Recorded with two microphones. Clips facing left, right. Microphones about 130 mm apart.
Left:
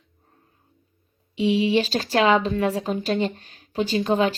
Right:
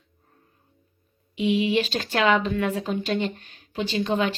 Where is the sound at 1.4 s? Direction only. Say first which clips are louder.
Left 2 dB; 35° left (ahead or behind).